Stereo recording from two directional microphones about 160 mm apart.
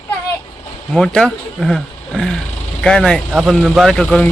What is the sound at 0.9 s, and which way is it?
Speech, 5° left (ahead or behind).